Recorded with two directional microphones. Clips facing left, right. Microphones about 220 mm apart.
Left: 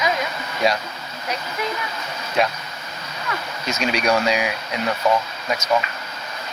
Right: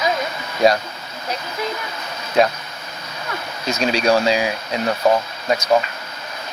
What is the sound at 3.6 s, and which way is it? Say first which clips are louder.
Speech: right 3 dB; 35° right (ahead or behind).